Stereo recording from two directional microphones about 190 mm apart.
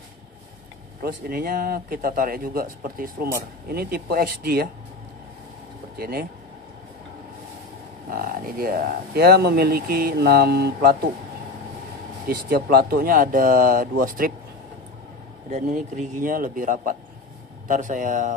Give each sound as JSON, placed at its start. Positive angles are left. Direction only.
{"t": 1.0, "sound": "speech", "side_deg": -50}
{"t": 5.9, "sound": "speech", "side_deg": -55}
{"t": 8.1, "sound": "speech", "side_deg": -50}
{"t": 12.3, "sound": "speech", "side_deg": -50}
{"t": 15.5, "sound": "speech", "side_deg": -40}